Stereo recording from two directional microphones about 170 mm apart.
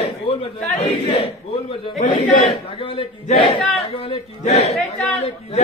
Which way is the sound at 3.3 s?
30° left (ahead or behind).